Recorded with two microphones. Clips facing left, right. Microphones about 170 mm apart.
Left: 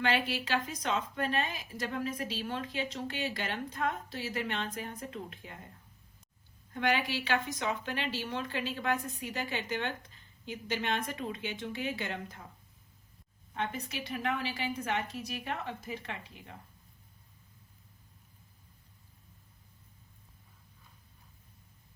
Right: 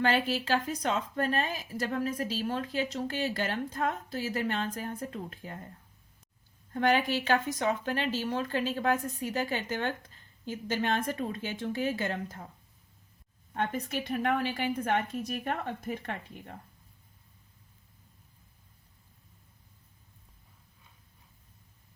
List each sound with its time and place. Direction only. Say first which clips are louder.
0.0 s speech: right 3 dB; 40° right (ahead or behind)
6.7 s speech: right 5 dB; 45° right (ahead or behind)
13.5 s speech: right 5 dB; 50° right (ahead or behind)